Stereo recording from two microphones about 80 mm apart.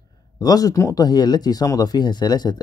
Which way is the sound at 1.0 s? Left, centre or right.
Left.